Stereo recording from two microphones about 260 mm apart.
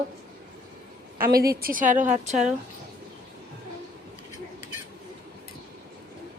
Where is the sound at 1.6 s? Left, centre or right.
Right.